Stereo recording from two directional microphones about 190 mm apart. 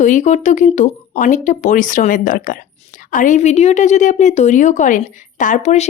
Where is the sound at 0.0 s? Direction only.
40° left (ahead or behind).